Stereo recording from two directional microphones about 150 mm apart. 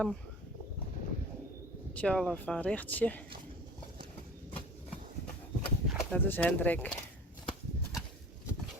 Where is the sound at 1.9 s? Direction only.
5° left (ahead or behind).